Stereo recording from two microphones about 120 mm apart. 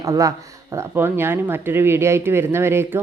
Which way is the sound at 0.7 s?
20° right (ahead or behind).